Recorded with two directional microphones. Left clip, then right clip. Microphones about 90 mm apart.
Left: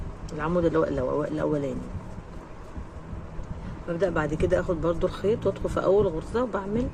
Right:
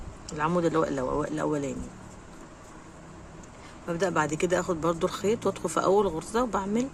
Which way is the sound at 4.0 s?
60° right (ahead or behind).